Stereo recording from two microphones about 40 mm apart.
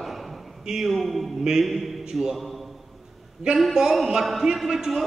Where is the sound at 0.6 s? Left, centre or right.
Centre.